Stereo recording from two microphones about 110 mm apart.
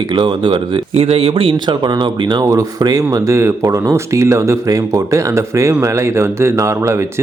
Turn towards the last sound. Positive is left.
turn(degrees=-25)  # may be behind; listen again after turning